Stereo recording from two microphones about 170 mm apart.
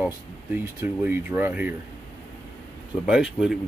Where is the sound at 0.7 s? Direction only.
10° right (ahead or behind).